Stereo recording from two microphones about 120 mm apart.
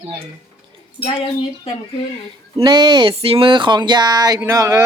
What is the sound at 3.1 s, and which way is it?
Speech, 50° right (ahead or behind).